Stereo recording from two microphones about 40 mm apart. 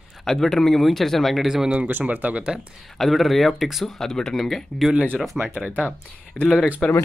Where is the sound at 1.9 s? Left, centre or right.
Right.